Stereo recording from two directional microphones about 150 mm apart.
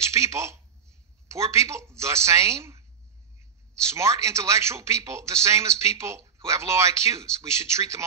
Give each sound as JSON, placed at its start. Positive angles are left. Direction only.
{"t": 0.0, "sound": "a man's voice", "side_deg": -20}